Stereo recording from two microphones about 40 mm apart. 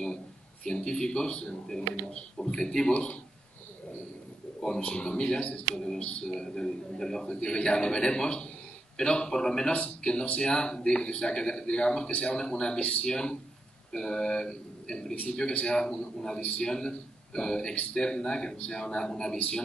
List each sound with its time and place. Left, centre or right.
0.7 s a man's voice: centre
2.9 s speech: left
4.6 s a man's voice: centre
16.3 s speech: left
16.6 s a man's voice: centre
19.3 s speech: left